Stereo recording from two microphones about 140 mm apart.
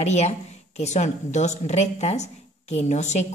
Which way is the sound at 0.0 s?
55° left (ahead or behind).